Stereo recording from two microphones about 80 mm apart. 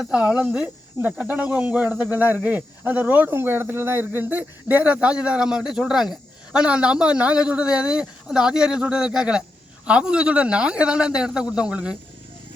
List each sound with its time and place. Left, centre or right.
0.0 s a man's voice: centre